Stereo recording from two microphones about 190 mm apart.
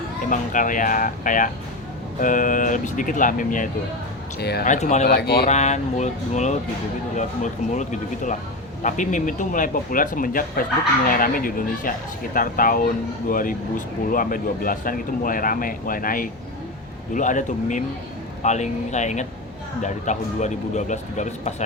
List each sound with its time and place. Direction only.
0.3 s speech: 45° left (ahead or behind)
4.4 s speech: 55° left (ahead or behind)
4.7 s speech: 40° left (ahead or behind)
5.0 s speech: 60° left (ahead or behind)
5.5 s speech: 35° left (ahead or behind)